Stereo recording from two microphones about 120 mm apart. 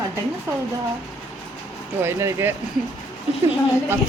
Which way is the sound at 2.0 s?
20° right (ahead or behind).